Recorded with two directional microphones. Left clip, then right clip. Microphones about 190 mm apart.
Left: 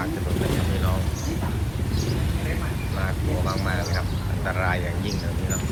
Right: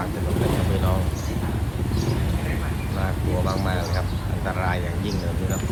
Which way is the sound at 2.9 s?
20° right (ahead or behind).